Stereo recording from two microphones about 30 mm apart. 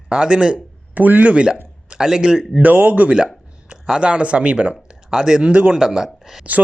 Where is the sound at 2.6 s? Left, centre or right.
Right.